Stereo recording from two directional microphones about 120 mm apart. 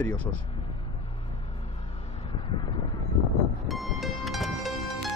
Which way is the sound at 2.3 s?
45° left (ahead or behind).